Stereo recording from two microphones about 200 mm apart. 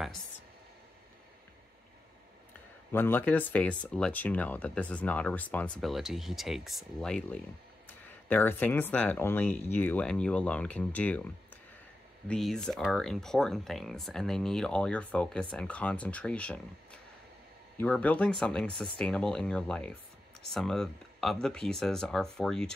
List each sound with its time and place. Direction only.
2.9 s speech: 10° left (ahead or behind)